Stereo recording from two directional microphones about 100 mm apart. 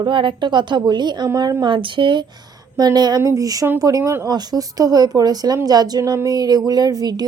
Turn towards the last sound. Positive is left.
turn(degrees=-40)  # may be behind; listen again after turning